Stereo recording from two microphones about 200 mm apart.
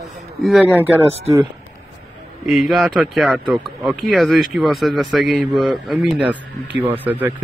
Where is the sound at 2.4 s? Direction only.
Centre (ahead or behind).